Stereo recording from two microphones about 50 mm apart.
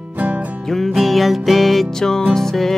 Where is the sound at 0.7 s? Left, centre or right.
Centre.